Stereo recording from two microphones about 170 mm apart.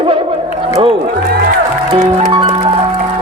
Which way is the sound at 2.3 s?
30° right (ahead or behind).